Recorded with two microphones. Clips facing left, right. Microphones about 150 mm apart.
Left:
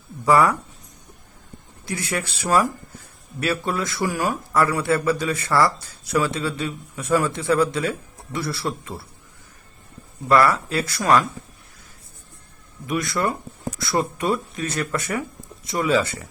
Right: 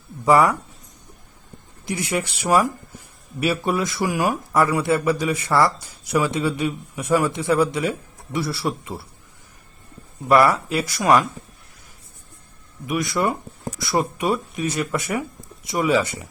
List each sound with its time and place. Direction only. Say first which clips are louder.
0.3 s speech: right 1 dB; 20° right (ahead or behind)
1.8 s speech: right 3 dB; 20° right (ahead or behind)
10.2 s speech: right 1 dB; 15° right (ahead or behind)
12.9 s speech: right 1 dB; 15° right (ahead or behind)